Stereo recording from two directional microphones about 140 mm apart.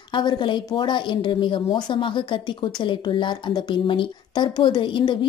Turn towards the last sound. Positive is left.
turn(degrees=35)  # may be behind; listen again after turning